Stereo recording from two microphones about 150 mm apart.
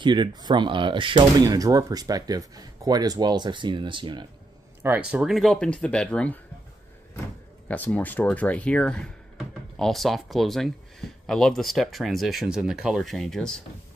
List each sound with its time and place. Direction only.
0.0 s speech: 30° right (ahead or behind)
5.1 s speech: 5° right (ahead or behind)
7.6 s speech: 10° left (ahead or behind)